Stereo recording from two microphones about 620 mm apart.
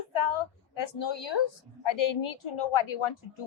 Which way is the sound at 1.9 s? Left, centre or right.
Left.